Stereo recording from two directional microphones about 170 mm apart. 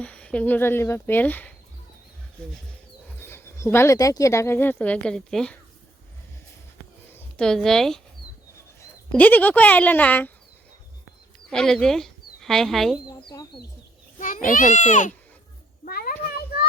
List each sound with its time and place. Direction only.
0.0 s speech: 5° left (ahead or behind)
3.2 s speech: 15° left (ahead or behind)
7.3 s speech: 5° left (ahead or behind)
11.4 s speech: 5° left (ahead or behind)
13.2 s speech: 25° left (ahead or behind)
14.2 s a child's voice: 50° left (ahead or behind)
15.8 s a sound: 60° left (ahead or behind)
16.2 s children playing: 65° left (ahead or behind)